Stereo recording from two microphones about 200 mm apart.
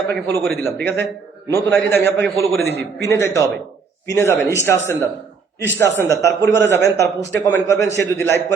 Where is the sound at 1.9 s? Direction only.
60° right (ahead or behind).